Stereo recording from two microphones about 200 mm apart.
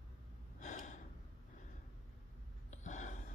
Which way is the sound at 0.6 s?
35° left (ahead or behind).